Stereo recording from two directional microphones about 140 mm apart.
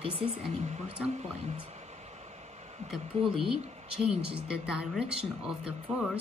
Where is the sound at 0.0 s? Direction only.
45° right (ahead or behind).